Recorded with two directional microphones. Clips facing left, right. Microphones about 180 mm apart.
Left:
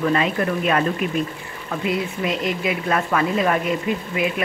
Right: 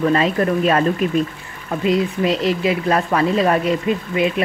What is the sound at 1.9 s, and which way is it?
Speech, 30° right (ahead or behind).